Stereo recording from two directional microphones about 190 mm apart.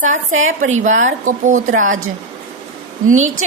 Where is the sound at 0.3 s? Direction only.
90° right.